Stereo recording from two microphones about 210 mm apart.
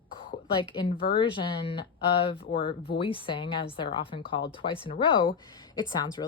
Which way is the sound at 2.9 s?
25° left (ahead or behind).